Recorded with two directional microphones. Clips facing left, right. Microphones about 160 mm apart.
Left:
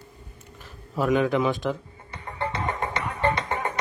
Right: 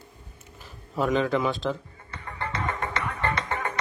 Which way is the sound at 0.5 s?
Centre (ahead or behind).